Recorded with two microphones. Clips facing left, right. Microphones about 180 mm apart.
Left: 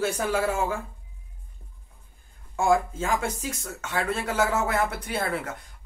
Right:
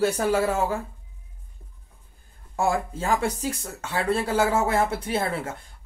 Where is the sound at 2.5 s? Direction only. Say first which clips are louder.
Left 2 dB; 35° right (ahead or behind).